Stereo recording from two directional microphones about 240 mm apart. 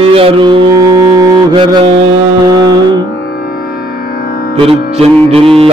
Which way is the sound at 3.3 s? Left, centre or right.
Left.